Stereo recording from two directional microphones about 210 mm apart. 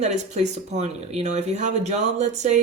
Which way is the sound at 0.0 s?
30° right (ahead or behind).